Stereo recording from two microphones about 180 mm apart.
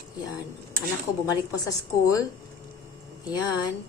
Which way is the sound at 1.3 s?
20° left (ahead or behind).